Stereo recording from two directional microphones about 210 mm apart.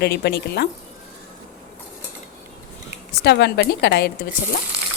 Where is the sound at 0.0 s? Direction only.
50° left (ahead or behind).